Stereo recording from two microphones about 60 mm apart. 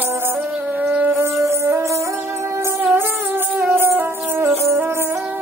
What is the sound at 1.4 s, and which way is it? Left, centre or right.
Music, right.